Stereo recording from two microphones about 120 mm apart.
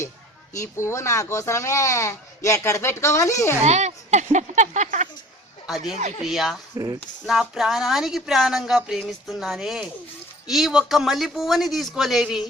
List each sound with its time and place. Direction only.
0.5 s speech: 25° left (ahead or behind)
3.6 s speech: 70° right (ahead or behind)
5.6 s speech: 5° right (ahead or behind)